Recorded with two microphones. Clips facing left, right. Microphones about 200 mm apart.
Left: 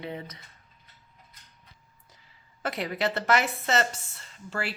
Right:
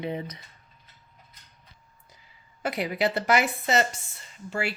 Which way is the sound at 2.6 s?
15° right (ahead or behind).